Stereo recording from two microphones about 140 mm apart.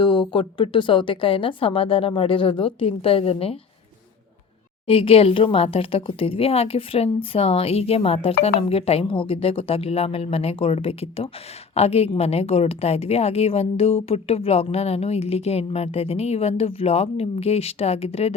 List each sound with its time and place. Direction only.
0.0 s speech: 35° left (ahead or behind)
4.9 s a woman's voice: 40° left (ahead or behind)